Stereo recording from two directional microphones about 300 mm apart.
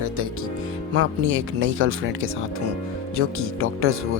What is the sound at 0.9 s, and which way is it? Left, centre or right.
Speech, right.